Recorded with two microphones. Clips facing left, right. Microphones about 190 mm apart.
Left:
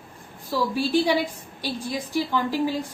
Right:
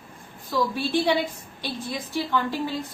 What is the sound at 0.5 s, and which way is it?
Speech, 10° left (ahead or behind).